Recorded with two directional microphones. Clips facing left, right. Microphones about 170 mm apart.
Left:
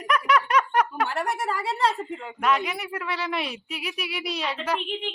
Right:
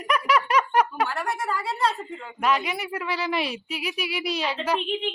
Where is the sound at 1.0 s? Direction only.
20° left (ahead or behind).